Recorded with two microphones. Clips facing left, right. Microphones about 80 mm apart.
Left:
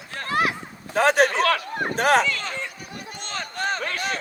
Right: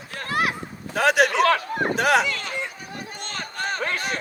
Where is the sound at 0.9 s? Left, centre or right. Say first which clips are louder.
Even; left.